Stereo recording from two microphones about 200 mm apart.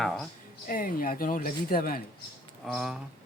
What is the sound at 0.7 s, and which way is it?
Speech, 45° left (ahead or behind).